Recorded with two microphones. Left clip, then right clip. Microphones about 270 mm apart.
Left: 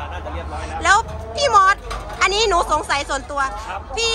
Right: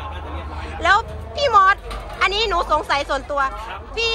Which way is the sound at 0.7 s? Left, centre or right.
Centre.